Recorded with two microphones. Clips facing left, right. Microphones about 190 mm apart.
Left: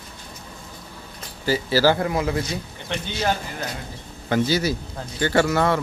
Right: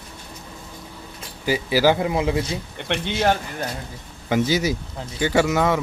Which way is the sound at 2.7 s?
60° right (ahead or behind).